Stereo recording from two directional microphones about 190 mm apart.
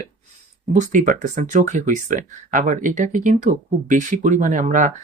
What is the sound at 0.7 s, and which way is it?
Speech, 45° right (ahead or behind).